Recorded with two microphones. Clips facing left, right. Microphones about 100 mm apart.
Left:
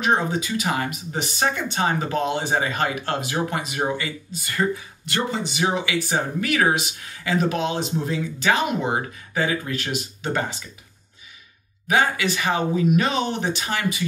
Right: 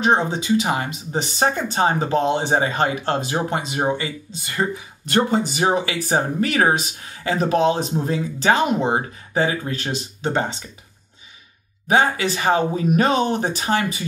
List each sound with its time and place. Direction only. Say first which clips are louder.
0.0 s speech: right 3 dB; 30° right (ahead or behind)
5.0 s speech: right 7 dB; 40° right (ahead or behind)
11.9 s speech: right 3 dB; 30° right (ahead or behind)